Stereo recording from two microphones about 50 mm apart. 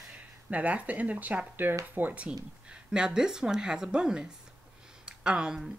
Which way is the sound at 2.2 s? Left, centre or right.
Centre.